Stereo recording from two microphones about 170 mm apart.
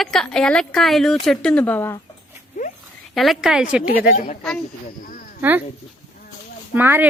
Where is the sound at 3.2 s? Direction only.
Centre (ahead or behind).